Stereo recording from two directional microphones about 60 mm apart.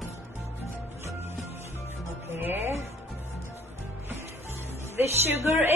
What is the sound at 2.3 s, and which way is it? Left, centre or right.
Speech, right.